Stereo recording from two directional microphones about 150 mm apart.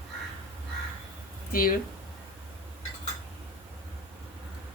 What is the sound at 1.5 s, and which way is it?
Speech, 75° left (ahead or behind).